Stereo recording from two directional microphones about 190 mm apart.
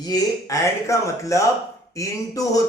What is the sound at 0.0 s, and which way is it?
Speech, 20° left (ahead or behind).